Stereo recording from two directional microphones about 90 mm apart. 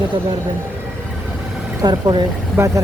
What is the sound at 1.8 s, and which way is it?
Speech, 50° right (ahead or behind).